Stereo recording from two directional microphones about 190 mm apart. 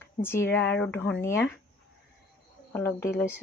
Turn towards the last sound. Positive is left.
turn(degrees=10)  # may be behind; listen again after turning